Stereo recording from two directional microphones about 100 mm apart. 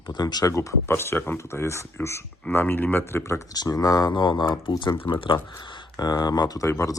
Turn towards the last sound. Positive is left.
turn(degrees=35)  # may be behind; listen again after turning